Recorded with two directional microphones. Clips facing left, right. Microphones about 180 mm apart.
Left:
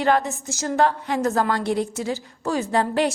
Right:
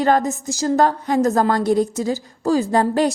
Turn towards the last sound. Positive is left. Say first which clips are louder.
# right 4 dB
turn(degrees=-40)  # may be behind; listen again after turning